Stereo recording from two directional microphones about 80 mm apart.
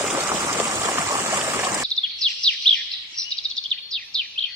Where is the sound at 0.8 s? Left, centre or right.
Right.